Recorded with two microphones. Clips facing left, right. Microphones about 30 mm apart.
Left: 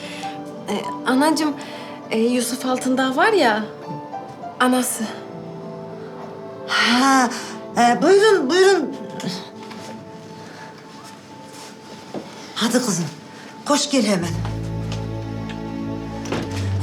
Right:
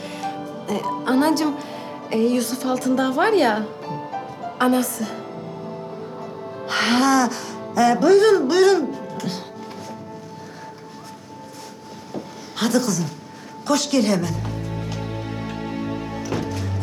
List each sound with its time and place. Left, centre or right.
0.0 s music: centre
0.7 s speech: centre
1.0 s a woman's voice: left
3.8 s music: right
4.5 s a woman's voice: left
6.7 s music: centre
8.4 s a woman's voice: centre
12.1 s a sound: centre
13.7 s a woman's voice: centre
15.0 s music: right
16.3 s music: centre